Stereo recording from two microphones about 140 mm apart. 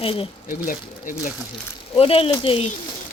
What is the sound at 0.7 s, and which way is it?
Speech, 75° left (ahead or behind).